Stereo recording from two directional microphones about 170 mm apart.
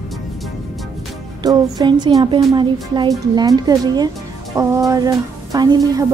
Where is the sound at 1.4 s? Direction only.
25° right (ahead or behind).